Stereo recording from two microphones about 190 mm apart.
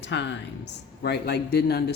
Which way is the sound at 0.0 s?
65° left (ahead or behind).